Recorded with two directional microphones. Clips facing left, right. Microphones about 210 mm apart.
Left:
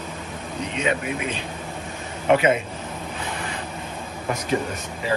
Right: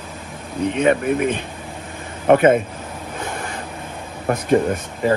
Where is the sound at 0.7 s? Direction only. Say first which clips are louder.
Right 8 dB; 55° right (ahead or behind).